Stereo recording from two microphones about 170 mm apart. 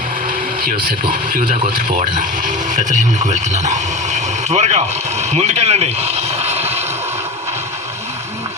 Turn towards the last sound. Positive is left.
turn(degrees=-40)  # may be behind; listen again after turning